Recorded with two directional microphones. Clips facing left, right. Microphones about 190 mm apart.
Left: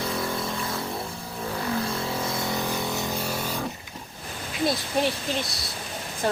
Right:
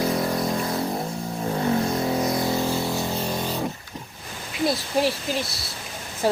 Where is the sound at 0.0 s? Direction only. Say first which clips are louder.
Right 5 dB; 30° right (ahead or behind).